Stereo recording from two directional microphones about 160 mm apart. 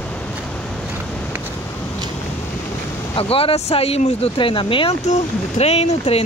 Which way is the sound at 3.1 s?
35° left (ahead or behind).